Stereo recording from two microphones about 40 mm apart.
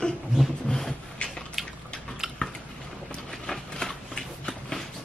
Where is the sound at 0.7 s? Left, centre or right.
Centre.